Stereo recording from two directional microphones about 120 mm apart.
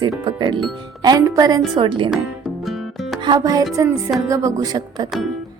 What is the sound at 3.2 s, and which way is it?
A woman's voice, 35° right (ahead or behind).